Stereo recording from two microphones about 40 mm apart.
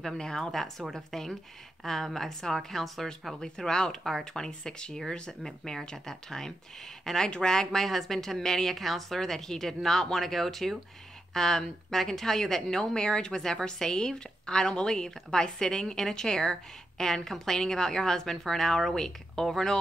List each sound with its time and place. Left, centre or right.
0.0 s a woman's voice: centre
3.3 s a woman's voice: centre